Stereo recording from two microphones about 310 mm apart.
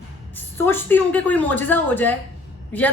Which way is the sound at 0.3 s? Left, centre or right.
Centre.